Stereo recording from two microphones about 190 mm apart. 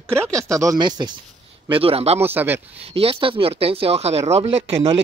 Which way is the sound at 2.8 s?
30° right (ahead or behind).